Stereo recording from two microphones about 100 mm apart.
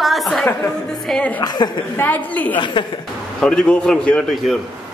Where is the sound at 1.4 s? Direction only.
45° left (ahead or behind).